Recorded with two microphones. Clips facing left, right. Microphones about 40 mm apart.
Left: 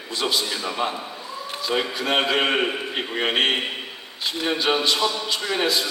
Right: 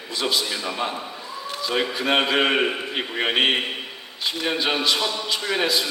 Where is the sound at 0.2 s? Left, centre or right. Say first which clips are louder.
Even; left.